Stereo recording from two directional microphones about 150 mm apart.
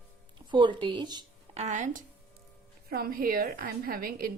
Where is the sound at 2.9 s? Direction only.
90° right.